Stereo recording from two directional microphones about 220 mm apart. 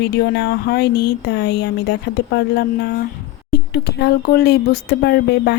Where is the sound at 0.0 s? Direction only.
45° left (ahead or behind).